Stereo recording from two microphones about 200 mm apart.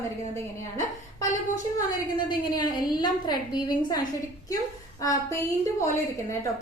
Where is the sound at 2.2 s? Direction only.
20° left (ahead or behind).